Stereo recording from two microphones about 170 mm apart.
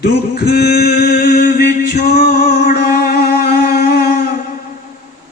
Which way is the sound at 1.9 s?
65° left (ahead or behind).